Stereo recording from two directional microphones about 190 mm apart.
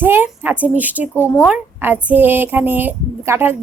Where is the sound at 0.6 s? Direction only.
10° right (ahead or behind).